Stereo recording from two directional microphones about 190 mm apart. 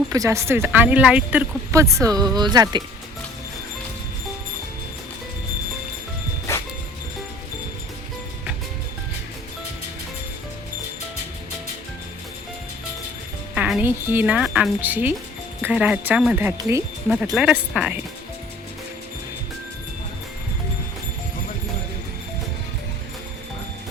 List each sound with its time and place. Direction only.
0.1 s speech: 15° right (ahead or behind)
6.5 s music: 15° left (ahead or behind)
13.5 s speech: 5° right (ahead or behind)